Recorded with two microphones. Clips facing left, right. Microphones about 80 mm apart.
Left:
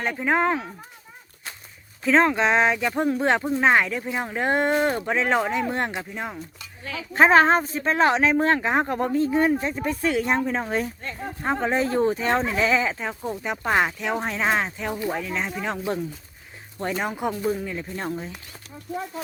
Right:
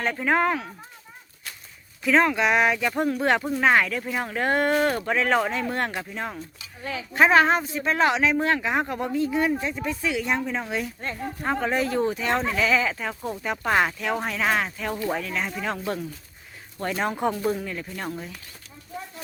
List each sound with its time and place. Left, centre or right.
0.0 s speech: centre
0.3 s speech: left
2.0 s speech: left
7.1 s speech: left
11.2 s speech: left
12.3 s speech: centre
17.0 s speech: centre
17.7 s speech: left